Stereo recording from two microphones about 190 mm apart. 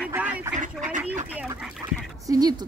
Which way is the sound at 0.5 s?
40° right (ahead or behind).